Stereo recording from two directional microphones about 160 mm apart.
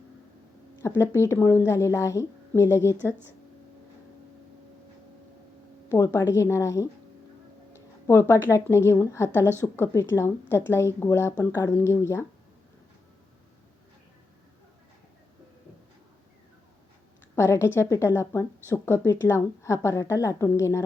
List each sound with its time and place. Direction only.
0.8 s a woman's voice: 15° left (ahead or behind)
5.9 s a woman's voice: 20° left (ahead or behind)
8.0 s a woman's voice: 15° left (ahead or behind)
17.3 s a woman's voice: 15° left (ahead or behind)